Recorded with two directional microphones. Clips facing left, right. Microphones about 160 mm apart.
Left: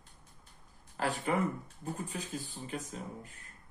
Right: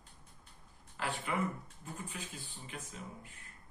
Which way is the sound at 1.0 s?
40° left (ahead or behind).